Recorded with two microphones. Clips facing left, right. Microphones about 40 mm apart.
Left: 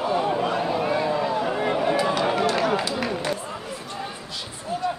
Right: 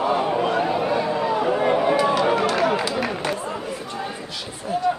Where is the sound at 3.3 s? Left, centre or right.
Right.